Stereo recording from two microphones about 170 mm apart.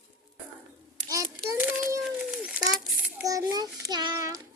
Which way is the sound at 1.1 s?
20° right (ahead or behind).